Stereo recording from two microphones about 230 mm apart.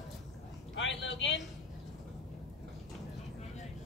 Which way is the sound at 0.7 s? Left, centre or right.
Left.